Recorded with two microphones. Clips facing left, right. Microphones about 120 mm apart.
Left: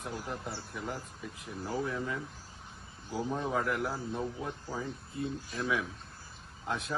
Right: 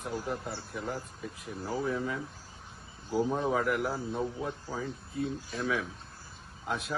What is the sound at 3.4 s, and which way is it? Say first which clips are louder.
A man's voice: right 3 dB; 5° right (ahead or behind).